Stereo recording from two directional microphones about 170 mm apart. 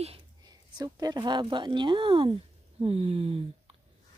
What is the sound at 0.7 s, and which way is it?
Speech, 25° right (ahead or behind).